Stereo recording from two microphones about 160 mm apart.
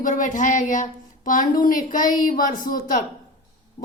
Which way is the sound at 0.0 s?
55° left (ahead or behind).